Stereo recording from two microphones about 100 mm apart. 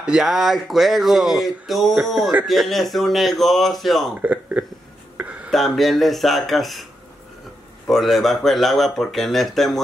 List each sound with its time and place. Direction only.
0.0 s speech: 5° right (ahead or behind)
4.2 s speech: 15° right (ahead or behind)
5.1 s a sound: 15° right (ahead or behind)
5.5 s speech: centre (ahead or behind)